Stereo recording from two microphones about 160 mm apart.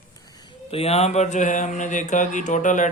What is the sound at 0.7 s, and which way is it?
Mantra, 40° left (ahead or behind).